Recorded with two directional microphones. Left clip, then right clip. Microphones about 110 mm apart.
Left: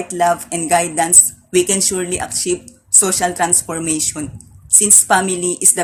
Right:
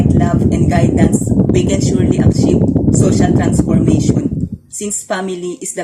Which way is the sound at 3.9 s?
25° right (ahead or behind).